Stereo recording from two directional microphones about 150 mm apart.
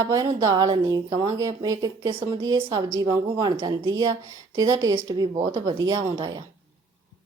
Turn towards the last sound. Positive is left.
turn(degrees=-30)  # may be behind; listen again after turning